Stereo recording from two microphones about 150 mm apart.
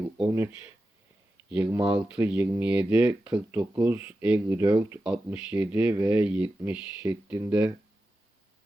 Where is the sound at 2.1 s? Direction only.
10° right (ahead or behind).